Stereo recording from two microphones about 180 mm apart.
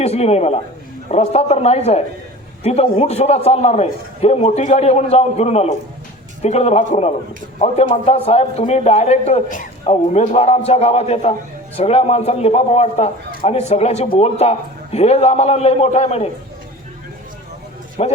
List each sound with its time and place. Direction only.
0.0 s a man's voice: 35° left (ahead or behind)
18.0 s a man's voice: 35° left (ahead or behind)